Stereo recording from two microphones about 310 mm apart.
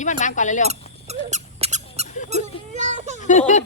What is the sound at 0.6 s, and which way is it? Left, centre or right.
Squeak, right.